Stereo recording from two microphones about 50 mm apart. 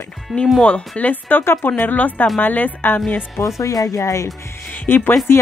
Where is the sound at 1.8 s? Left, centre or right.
Left.